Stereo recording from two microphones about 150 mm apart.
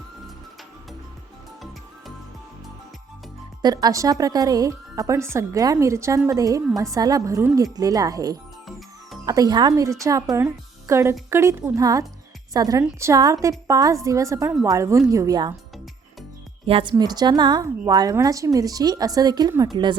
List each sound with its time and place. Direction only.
3.6 s speech: 25° right (ahead or behind)
16.6 s speech: 40° right (ahead or behind)
16.9 s speech: 25° right (ahead or behind)